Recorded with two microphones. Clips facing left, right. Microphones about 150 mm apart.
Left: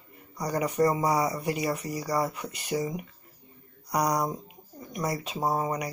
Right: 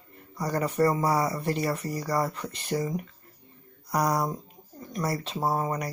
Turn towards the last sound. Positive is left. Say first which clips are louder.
# even
turn(degrees=15)  # may be behind; listen again after turning